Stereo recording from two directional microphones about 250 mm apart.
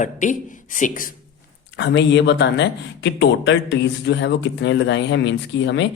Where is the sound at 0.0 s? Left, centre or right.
Left.